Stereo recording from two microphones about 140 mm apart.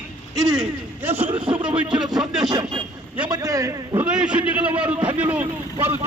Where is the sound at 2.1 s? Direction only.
5° right (ahead or behind).